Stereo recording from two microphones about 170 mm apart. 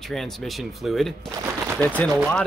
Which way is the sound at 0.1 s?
Centre (ahead or behind).